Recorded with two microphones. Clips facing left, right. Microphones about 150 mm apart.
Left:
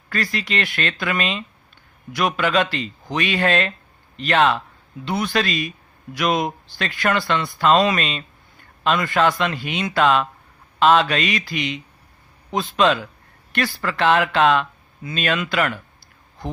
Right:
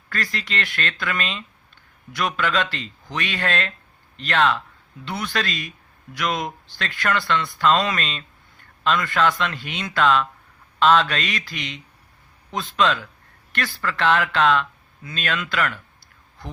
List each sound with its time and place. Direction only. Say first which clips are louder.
0.1 s speech: left 4 dB; 10° left (ahead or behind)